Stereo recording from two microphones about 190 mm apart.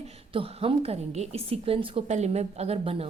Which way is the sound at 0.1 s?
30° right (ahead or behind).